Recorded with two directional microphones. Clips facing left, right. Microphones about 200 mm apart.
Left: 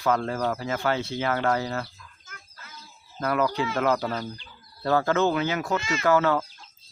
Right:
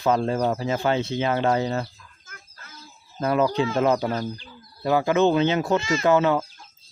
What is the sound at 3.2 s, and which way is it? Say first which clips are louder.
Speech: right 4 dB; 25° right (ahead or behind).